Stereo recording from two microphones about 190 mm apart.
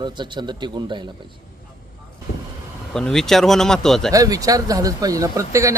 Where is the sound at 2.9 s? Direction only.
Centre (ahead or behind).